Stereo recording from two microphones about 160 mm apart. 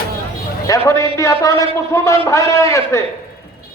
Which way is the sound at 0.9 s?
20° left (ahead or behind).